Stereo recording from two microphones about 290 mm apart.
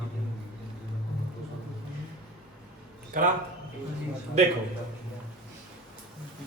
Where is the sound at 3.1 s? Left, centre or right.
Right.